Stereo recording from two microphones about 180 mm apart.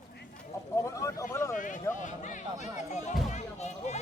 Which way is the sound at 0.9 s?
15° left (ahead or behind).